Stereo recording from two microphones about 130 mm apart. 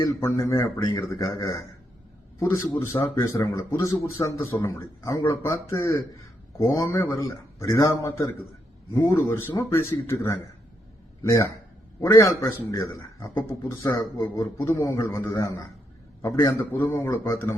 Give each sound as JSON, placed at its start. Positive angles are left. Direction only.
{"t": 0.2, "sound": "a man's voice", "side_deg": 20}
{"t": 2.7, "sound": "a man's voice", "side_deg": 20}